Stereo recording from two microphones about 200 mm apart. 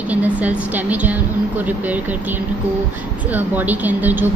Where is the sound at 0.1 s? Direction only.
5° right (ahead or behind).